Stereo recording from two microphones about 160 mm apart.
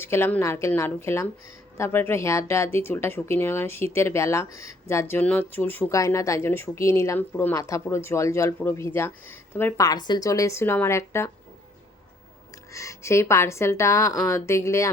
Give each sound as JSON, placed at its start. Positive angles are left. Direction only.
{"t": 0.0, "sound": "speech", "side_deg": 15}
{"t": 12.7, "sound": "speech", "side_deg": 20}